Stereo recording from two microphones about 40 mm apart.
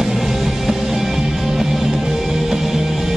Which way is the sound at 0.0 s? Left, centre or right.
Centre.